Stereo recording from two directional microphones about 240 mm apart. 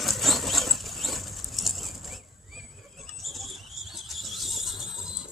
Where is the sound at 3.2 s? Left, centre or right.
Centre.